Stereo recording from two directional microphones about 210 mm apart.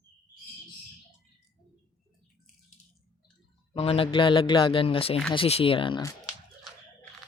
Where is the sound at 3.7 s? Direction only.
25° left (ahead or behind).